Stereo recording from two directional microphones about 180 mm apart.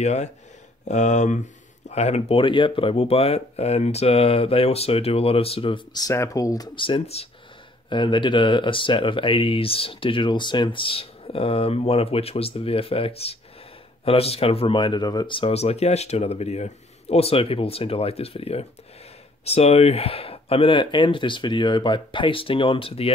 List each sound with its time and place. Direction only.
0.0 s speech: 40° left (ahead or behind)